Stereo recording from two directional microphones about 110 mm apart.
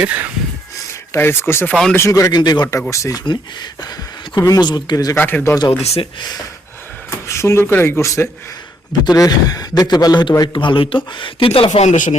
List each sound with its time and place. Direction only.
0.0 s a sound: 15° right (ahead or behind)
1.1 s speech: 20° left (ahead or behind)
1.7 s speech: 5° left (ahead or behind)
2.0 s speech: 25° left (ahead or behind)
2.3 s speech: 40° left (ahead or behind)
2.9 s speech: 30° left (ahead or behind)
3.2 s speech: 40° left (ahead or behind)
5.1 s speech: 20° left (ahead or behind)
5.8 s speech: 70° left (ahead or behind)
6.1 s speech: 35° left (ahead or behind)
7.3 s a man's voice: 25° left (ahead or behind); by 11.9 s 75° left (ahead or behind)